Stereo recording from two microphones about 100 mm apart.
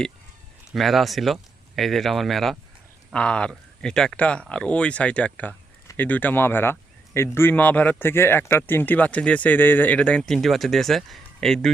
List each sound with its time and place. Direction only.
0.7 s speech: centre (ahead or behind)